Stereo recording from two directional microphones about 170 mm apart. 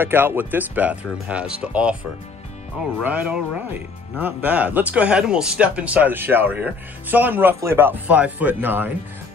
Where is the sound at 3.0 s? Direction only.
10° right (ahead or behind).